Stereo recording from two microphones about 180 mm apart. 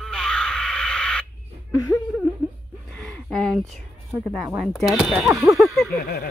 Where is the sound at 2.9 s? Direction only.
Centre (ahead or behind).